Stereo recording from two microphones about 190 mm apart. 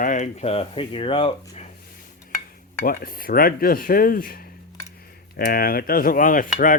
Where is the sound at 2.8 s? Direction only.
50° left (ahead or behind).